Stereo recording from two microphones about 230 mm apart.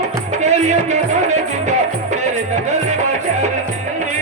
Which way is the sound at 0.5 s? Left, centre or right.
Right.